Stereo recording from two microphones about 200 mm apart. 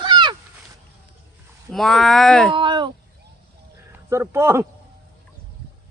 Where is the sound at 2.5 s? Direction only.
25° right (ahead or behind).